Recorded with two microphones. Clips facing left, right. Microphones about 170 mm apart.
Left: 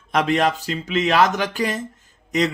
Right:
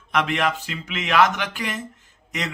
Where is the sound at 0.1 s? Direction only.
35° left (ahead or behind).